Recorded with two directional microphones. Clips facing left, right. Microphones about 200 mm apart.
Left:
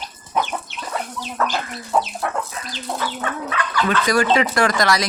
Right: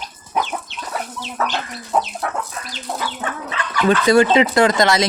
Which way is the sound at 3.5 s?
25° right (ahead or behind).